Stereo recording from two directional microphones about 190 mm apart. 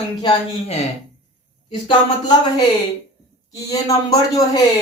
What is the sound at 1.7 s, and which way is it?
Speech, 25° left (ahead or behind).